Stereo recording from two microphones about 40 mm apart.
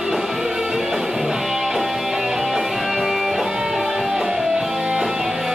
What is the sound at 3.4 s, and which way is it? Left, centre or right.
Music, centre.